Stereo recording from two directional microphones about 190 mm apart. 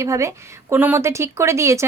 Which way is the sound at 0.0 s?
15° right (ahead or behind).